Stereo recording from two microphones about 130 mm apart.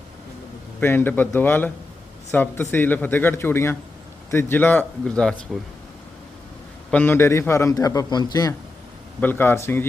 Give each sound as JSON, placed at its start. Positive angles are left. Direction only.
{"t": 0.8, "sound": "speech", "side_deg": 15}
{"t": 6.9, "sound": "a man's voice", "side_deg": 15}
{"t": 9.2, "sound": "speech", "side_deg": 15}